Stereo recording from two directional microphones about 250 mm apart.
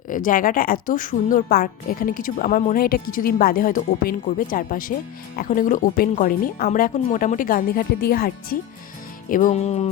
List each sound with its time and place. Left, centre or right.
0.3 s a woman's voice: left
9.3 s music: left